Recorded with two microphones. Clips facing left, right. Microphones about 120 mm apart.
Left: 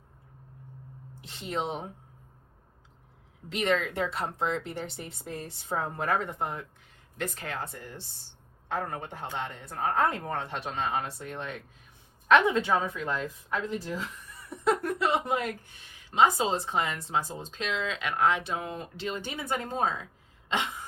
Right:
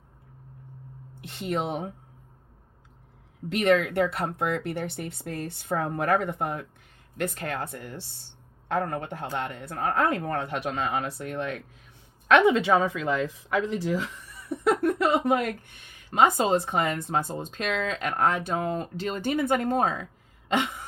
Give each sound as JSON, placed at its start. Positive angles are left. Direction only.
{"t": 1.2, "sound": "speech", "side_deg": -55}
{"t": 3.5, "sound": "speech", "side_deg": -55}
{"t": 12.3, "sound": "a woman's voice", "side_deg": -75}
{"t": 14.5, "sound": "speech", "side_deg": -65}